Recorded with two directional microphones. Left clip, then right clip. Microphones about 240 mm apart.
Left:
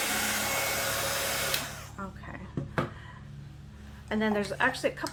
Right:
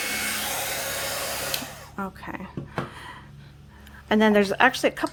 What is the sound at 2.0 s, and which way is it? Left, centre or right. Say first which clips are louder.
Speech: right 8 dB; right.